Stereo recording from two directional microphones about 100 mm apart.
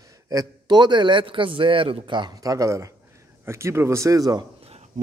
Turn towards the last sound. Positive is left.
turn(degrees=-40)  # may be behind; listen again after turning